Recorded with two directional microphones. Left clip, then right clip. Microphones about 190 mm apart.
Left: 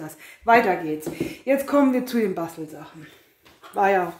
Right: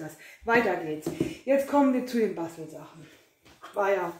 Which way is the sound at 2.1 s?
50° left (ahead or behind).